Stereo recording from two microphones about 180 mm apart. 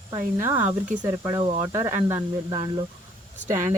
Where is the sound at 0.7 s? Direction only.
45° right (ahead or behind).